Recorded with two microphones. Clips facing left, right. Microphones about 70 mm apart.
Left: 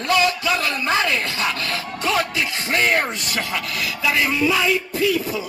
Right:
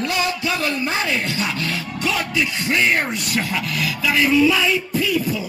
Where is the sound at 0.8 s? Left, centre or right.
Left.